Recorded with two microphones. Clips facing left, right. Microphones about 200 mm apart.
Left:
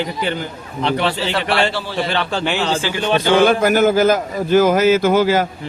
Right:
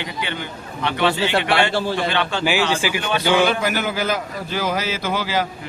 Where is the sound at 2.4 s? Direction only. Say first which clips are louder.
Even; 10° right (ahead or behind).